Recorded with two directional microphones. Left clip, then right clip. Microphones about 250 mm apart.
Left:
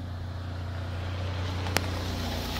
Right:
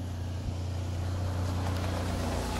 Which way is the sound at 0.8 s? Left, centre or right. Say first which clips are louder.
Left 3 dB; centre.